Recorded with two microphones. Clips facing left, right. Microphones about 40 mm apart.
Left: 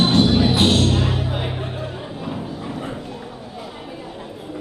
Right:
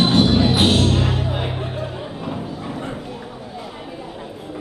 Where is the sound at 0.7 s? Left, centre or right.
Centre.